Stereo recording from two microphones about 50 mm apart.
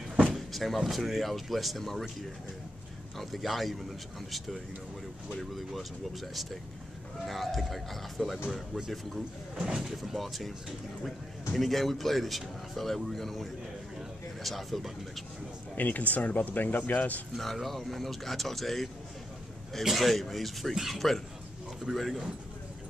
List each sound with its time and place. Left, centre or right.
0.3 s a sound: centre
0.7 s speech: centre
3.2 s speech: centre
5.3 s speech: centre
9.6 s speech: centre
9.8 s speech: centre
11.5 s speech: centre
15.7 s speech: left
17.4 s speech: centre